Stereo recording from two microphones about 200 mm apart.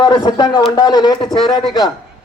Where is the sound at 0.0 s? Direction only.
20° left (ahead or behind).